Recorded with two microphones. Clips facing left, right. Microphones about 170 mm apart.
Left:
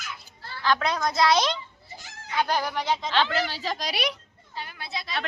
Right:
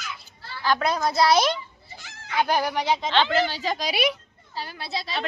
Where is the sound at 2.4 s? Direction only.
15° right (ahead or behind).